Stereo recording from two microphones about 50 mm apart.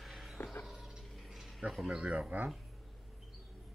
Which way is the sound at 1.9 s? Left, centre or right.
Right.